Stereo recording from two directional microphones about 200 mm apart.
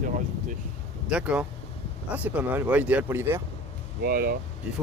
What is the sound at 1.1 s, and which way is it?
Speech, 5° right (ahead or behind).